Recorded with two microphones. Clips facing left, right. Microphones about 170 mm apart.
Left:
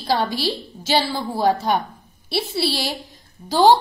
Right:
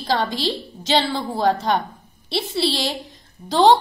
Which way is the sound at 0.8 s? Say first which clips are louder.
Right 1 dB; 5° left (ahead or behind).